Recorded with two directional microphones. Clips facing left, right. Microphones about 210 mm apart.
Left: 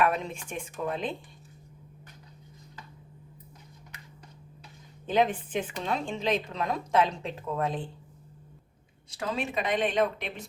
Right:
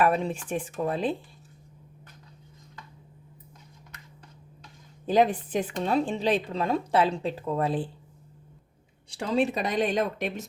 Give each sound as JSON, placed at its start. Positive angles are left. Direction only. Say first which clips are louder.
{"t": 0.0, "sound": "a woman's voice", "louder": "right 3 dB", "side_deg": -35}
{"t": 5.0, "sound": "a woman's voice", "louder": "right 3 dB", "side_deg": -35}
{"t": 9.0, "sound": "a woman's voice", "louder": "right 7 dB", "side_deg": -30}